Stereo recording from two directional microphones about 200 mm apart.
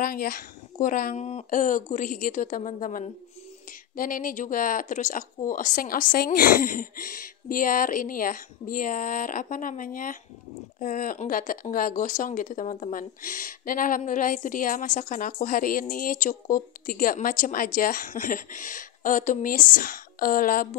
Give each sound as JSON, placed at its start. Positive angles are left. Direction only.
{"t": 0.0, "sound": "speech", "side_deg": 45}